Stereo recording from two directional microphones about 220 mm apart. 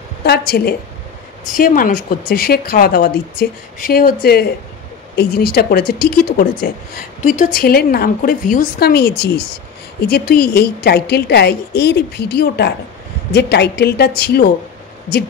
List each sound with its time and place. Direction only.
0.2 s a woman's voice: 45° left (ahead or behind)